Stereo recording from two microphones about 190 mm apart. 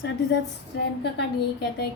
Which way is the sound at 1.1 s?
60° left (ahead or behind).